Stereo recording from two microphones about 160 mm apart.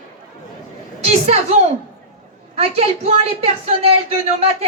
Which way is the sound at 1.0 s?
45° right (ahead or behind).